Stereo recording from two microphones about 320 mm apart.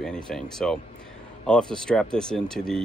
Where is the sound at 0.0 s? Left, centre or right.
Centre.